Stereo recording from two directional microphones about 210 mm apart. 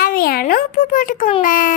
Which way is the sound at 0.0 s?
45° left (ahead or behind).